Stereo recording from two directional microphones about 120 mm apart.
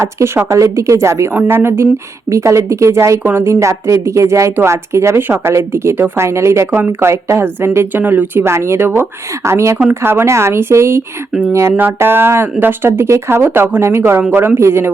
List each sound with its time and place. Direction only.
0.0 s a woman's voice: 20° right (ahead or behind)
11.3 s speech: 5° right (ahead or behind)
11.5 s a woman's voice: 20° right (ahead or behind)